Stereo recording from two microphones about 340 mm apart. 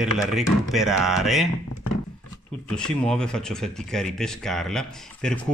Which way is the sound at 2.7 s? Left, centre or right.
Centre.